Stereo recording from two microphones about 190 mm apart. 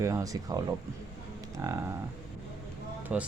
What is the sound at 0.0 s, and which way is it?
Speech, 15° right (ahead or behind).